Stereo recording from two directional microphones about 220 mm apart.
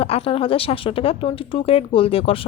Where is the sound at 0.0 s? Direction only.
25° left (ahead or behind).